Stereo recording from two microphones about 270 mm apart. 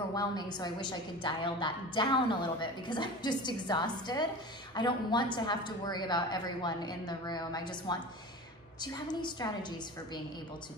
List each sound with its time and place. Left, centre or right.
0.1 s a woman's voice: centre